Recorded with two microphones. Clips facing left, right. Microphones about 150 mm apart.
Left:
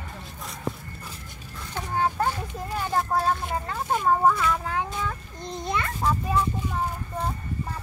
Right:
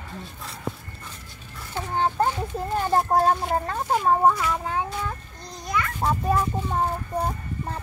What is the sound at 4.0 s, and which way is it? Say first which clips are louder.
Speech: right 1 dB; 25° right (ahead or behind).